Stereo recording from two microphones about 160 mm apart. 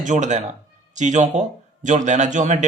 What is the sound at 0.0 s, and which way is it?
A man's voice, 50° right (ahead or behind).